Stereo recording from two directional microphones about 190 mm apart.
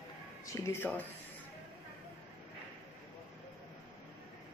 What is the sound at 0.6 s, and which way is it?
Speech, 15° left (ahead or behind).